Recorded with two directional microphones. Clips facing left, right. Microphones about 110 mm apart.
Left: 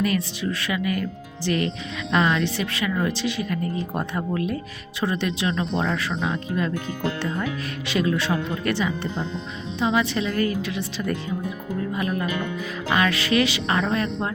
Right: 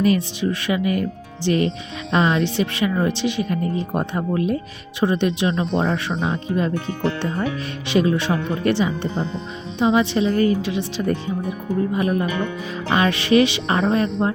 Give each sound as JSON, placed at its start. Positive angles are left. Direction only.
{"t": 0.0, "sound": "a woman's voice", "side_deg": -25}
{"t": 7.9, "sound": "a woman's voice", "side_deg": -20}